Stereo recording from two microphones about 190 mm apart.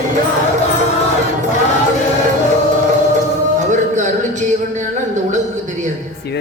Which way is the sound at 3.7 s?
40° right (ahead or behind).